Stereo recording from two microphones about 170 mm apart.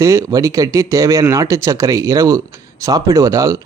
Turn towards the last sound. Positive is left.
turn(degrees=-20)  # may be behind; listen again after turning